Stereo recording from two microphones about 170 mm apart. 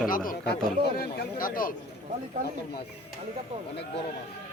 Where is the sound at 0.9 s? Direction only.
60° left (ahead or behind).